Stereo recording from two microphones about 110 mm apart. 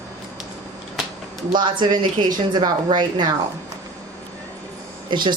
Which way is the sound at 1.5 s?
45° right (ahead or behind).